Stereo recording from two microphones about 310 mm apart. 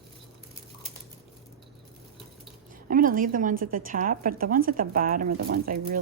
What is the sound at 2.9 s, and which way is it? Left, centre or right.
A woman's voice, right.